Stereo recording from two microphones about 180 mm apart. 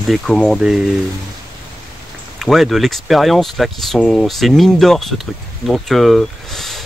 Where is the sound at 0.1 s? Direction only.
5° left (ahead or behind).